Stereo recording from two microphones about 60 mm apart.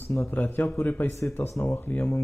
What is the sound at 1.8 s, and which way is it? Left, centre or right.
Speech, left.